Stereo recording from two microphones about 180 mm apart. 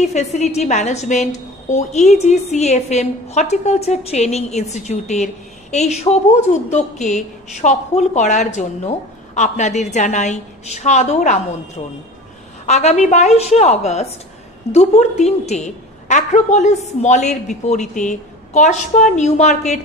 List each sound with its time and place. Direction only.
0.0 s a woman's voice: 40° left (ahead or behind)
6.7 s a woman's voice: 40° left (ahead or behind)